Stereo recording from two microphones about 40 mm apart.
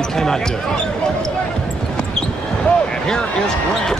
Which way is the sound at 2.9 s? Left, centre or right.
Centre.